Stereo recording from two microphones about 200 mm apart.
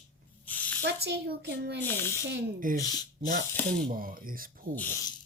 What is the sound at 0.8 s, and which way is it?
Speech, 55° right (ahead or behind).